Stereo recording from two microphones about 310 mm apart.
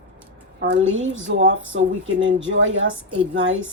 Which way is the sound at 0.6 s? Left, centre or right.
Right.